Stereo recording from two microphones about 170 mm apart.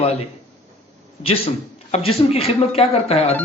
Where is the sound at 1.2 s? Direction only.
35° left (ahead or behind).